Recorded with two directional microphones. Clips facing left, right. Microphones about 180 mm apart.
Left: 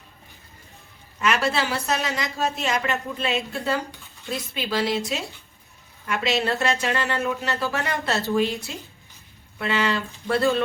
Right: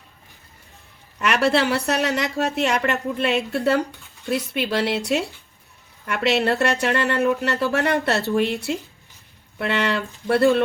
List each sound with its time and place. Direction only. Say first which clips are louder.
1.2 s a woman's voice: right 4 dB; 65° right (ahead or behind)
9.6 s speech: right 2 dB; 65° right (ahead or behind)